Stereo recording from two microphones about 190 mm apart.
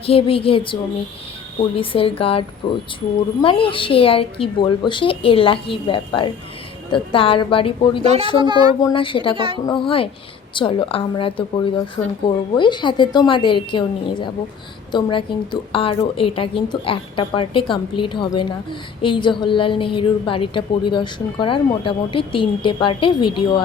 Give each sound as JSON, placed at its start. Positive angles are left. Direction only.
{"t": 0.0, "sound": "a woman's voice", "side_deg": 30}
{"t": 8.0, "sound": "speech", "side_deg": -35}
{"t": 8.4, "sound": "speech", "side_deg": -25}
{"t": 8.8, "sound": "a woman's voice", "side_deg": 25}
{"t": 9.3, "sound": "speech", "side_deg": -30}
{"t": 9.6, "sound": "a woman's voice", "side_deg": 25}